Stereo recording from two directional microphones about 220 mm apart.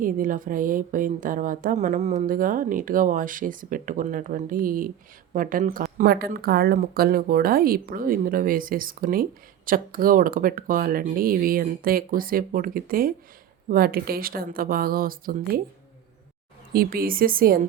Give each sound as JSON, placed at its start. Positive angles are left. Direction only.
{"t": 0.0, "sound": "a woman's voice", "side_deg": -40}
{"t": 16.7, "sound": "a woman's voice", "side_deg": -40}